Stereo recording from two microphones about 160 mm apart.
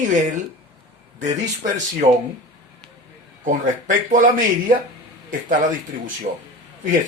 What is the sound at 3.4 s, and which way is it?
Speech, 55° right (ahead or behind).